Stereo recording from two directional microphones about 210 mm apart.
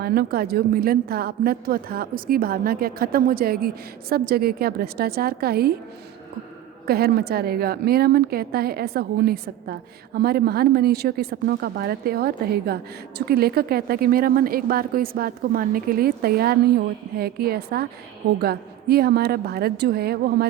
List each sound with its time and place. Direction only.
0.0 s a woman's voice: 50° right (ahead or behind)
6.8 s a woman's voice: 45° right (ahead or behind)